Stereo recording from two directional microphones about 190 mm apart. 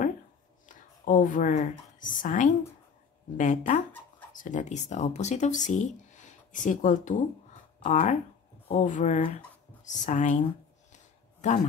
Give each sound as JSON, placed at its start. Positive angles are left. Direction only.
{"t": 0.7, "sound": "a sound", "side_deg": 45}
{"t": 2.2, "sound": "speech", "side_deg": 40}
{"t": 11.4, "sound": "a man's voice", "side_deg": 40}